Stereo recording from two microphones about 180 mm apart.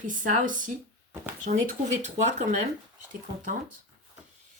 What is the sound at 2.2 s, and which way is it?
Speech, 40° right (ahead or behind).